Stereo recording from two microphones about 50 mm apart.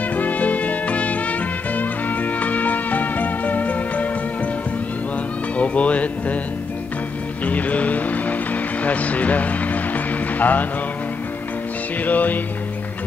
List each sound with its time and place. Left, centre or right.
0.1 s music: left
5.6 s speech: left
7.4 s speech: left
8.8 s music: left
12.0 s music: left